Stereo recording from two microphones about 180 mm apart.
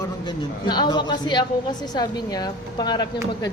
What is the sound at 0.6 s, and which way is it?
A woman's voice, 25° left (ahead or behind).